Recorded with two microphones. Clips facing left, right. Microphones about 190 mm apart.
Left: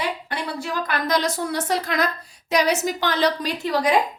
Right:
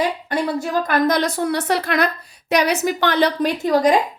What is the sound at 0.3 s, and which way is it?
A woman's voice, 45° right (ahead or behind).